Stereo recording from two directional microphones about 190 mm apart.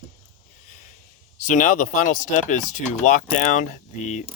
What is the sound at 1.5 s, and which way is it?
Speech, 45° left (ahead or behind).